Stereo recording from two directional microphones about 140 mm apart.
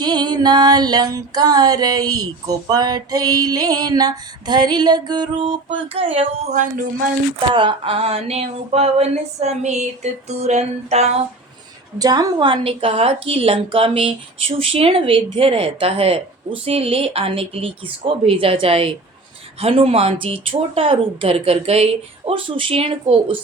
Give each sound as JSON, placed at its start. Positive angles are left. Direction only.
{"t": 0.0, "sound": "music", "side_deg": -30}
{"t": 7.3, "sound": "speech", "side_deg": -35}
{"t": 11.9, "sound": "a woman's voice", "side_deg": -30}